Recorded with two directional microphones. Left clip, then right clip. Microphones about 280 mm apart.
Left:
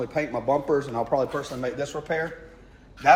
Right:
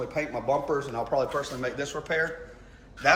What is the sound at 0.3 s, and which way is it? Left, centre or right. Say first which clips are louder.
A man's voice: left 3 dB; left.